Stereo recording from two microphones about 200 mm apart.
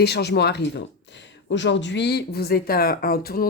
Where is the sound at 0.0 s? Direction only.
55° left (ahead or behind).